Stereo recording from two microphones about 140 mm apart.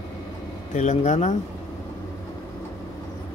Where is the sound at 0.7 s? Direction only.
55° left (ahead or behind).